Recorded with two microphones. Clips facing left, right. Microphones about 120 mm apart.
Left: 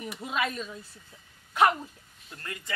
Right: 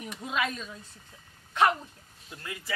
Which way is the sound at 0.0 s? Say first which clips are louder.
Left 1 dB; 5° left (ahead or behind).